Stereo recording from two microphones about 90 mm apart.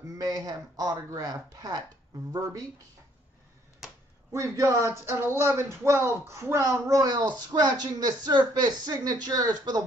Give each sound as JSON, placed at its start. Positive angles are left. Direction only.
{"t": 0.0, "sound": "speech", "side_deg": -45}
{"t": 4.3, "sound": "speech", "side_deg": -35}